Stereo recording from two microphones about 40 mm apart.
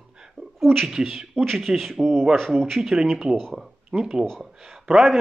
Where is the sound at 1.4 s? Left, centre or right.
Centre.